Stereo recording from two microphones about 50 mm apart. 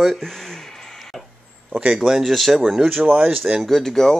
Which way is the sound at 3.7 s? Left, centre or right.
Centre.